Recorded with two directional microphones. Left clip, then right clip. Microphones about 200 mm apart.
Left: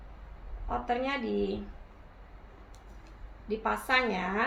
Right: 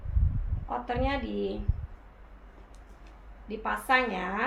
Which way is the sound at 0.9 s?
10° left (ahead or behind).